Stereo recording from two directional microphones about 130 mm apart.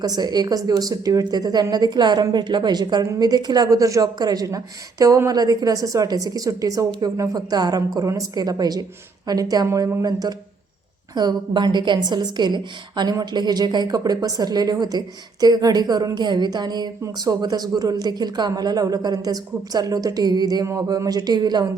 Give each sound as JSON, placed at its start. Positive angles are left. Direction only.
{"t": 0.0, "sound": "a woman's voice", "side_deg": -30}